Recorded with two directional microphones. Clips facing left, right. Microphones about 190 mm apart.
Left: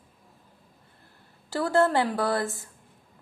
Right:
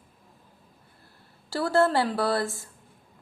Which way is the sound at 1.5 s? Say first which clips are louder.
Even; 20° left (ahead or behind).